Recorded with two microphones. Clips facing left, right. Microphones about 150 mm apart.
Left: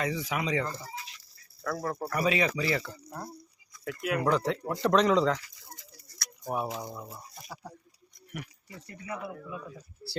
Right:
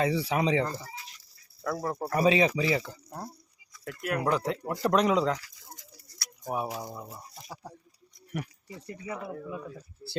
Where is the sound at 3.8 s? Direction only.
Centre (ahead or behind).